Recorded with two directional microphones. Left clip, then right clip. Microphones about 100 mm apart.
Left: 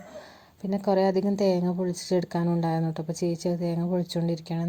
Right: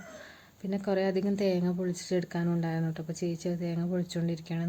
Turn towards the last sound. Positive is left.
turn(degrees=30)  # may be behind; listen again after turning